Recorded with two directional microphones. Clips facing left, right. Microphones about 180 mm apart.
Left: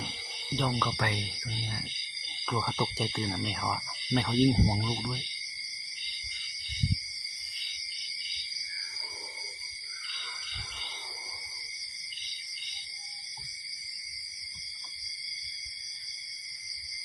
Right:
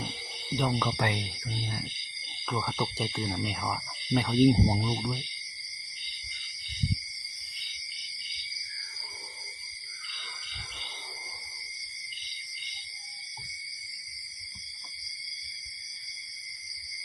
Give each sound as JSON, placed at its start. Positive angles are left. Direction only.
{"t": 0.5, "sound": "speech", "side_deg": -10}
{"t": 2.5, "sound": "speech", "side_deg": 0}